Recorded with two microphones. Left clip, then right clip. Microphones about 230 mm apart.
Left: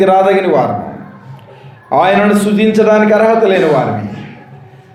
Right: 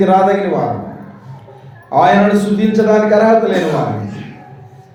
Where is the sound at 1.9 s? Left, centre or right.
Left.